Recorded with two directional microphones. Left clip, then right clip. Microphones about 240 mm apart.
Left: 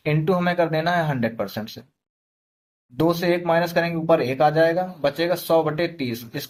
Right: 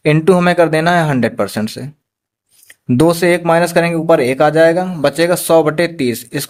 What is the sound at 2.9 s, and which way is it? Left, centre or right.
A man's voice, right.